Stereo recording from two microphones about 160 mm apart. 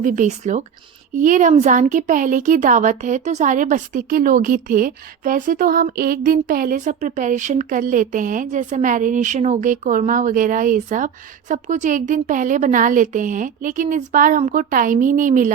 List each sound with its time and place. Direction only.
0.0 s a woman's voice: 50° right (ahead or behind)